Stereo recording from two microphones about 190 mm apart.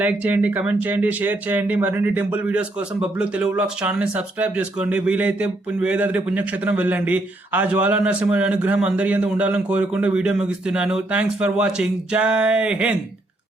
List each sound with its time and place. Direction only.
0.0 s speech: 10° right (ahead or behind)